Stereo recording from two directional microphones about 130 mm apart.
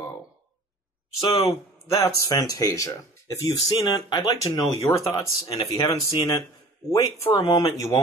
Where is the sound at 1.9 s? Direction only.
25° left (ahead or behind).